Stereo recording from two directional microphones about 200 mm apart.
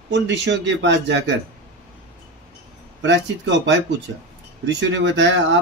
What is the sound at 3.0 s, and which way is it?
Speech, 65° right (ahead or behind).